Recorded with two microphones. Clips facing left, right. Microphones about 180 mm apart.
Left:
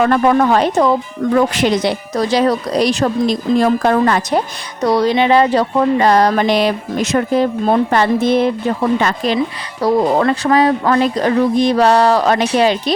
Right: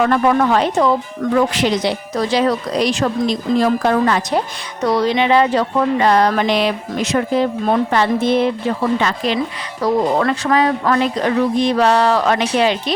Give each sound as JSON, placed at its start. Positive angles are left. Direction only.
{"t": 0.0, "sound": "a woman's voice", "side_deg": 40}
{"t": 1.2, "sound": "speech", "side_deg": 30}
{"t": 1.5, "sound": "a woman's voice", "side_deg": 50}
{"t": 3.6, "sound": "speech", "side_deg": 50}
{"t": 4.8, "sound": "a woman's voice", "side_deg": 35}
{"t": 9.8, "sound": "a woman's voice", "side_deg": 35}